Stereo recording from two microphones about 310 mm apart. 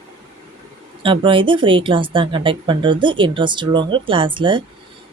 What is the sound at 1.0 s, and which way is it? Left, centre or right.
A woman's voice, centre.